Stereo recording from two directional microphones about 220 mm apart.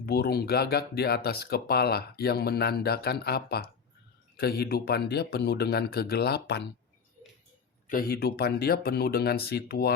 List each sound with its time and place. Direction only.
0.0 s speech: 45° left (ahead or behind)
7.9 s speech: 40° left (ahead or behind)